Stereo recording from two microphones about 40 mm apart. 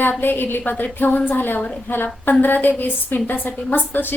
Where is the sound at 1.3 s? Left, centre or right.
Left.